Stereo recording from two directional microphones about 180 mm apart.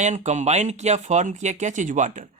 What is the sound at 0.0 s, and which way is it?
Speech, 40° right (ahead or behind).